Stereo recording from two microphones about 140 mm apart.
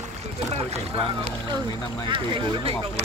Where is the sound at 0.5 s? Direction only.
45° right (ahead or behind).